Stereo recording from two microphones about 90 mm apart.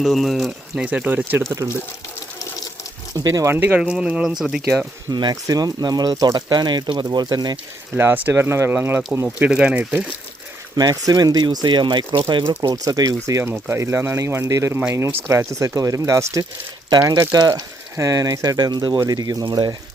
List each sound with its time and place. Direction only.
0.0 s speech: centre (ahead or behind)
0.9 s speech: 20° right (ahead or behind)
3.2 s speech: 40° right (ahead or behind)
3.5 s speech: 20° right (ahead or behind)
3.8 s speech: 10° right (ahead or behind)
5.1 s speech: 50° right (ahead or behind)
7.9 s speech: 25° right (ahead or behind)
9.2 s speech: 15° right (ahead or behind)
10.8 s speech: 45° right (ahead or behind); by 12.5 s 60° right (ahead or behind)
12.6 s speech: 45° right (ahead or behind)
13.4 s speech: 25° right (ahead or behind)
14.7 s speech: 15° right (ahead or behind)
15.3 s speech: 30° right (ahead or behind); by 19.7 s 50° right (ahead or behind)